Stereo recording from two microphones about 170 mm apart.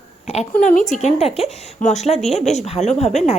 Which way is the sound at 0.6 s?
50° left (ahead or behind).